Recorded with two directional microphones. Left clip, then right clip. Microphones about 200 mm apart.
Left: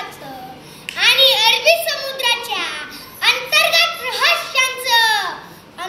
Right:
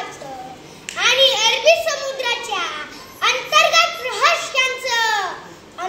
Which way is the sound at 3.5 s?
20° right (ahead or behind).